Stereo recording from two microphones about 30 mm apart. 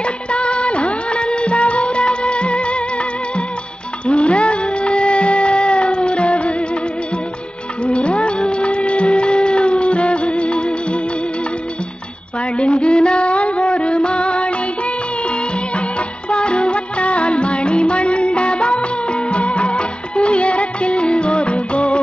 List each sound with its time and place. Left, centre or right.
0.0 s music: left
7.8 s music: left
12.5 s music of bollywood: left
16.3 s music: left